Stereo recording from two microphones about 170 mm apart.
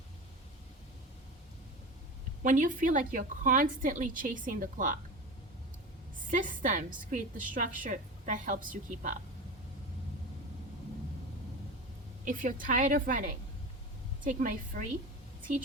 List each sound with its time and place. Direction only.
2.4 s a woman's voice: 50° right (ahead or behind)
6.2 s a woman's voice: 50° right (ahead or behind)
12.2 s a woman's voice: 50° right (ahead or behind)